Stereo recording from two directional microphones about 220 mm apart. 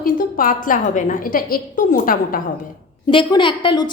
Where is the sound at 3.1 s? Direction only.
20° left (ahead or behind).